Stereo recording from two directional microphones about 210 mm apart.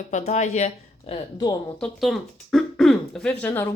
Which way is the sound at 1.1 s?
20° left (ahead or behind).